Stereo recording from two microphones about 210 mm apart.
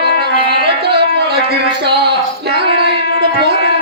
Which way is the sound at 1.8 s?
50° right (ahead or behind).